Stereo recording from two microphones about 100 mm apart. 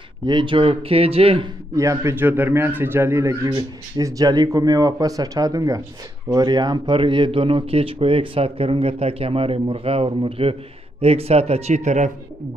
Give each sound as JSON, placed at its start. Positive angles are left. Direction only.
{"t": 0.3, "sound": "speech", "side_deg": -55}
{"t": 1.8, "sound": "speech", "side_deg": -30}
{"t": 2.1, "sound": "a man's voice", "side_deg": -20}
{"t": 3.4, "sound": "speech", "side_deg": -50}
{"t": 4.0, "sound": "speech", "side_deg": -40}
{"t": 11.0, "sound": "speech", "side_deg": -85}